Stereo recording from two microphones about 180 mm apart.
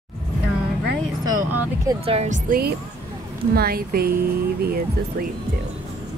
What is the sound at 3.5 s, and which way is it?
A woman's voice, 55° right (ahead or behind).